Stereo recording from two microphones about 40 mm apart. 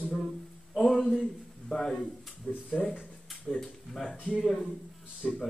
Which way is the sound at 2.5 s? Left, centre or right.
Left.